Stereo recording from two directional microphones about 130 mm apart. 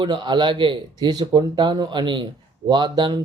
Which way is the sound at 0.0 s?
35° right (ahead or behind).